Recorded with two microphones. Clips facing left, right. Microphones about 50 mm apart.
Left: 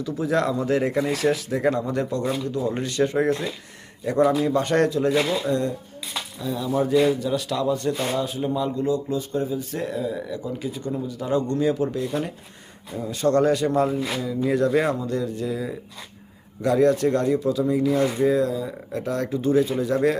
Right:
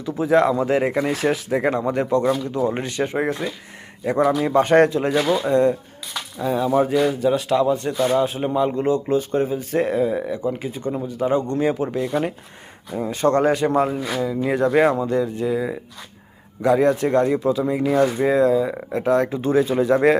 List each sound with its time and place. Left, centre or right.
0.0 s speech: right
8.3 s speech: right
14.2 s speech: right
14.5 s speech: right
18.9 s speech: right
19.3 s speech: right